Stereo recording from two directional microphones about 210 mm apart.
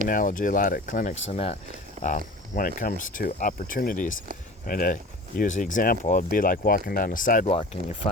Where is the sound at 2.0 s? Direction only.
40° left (ahead or behind).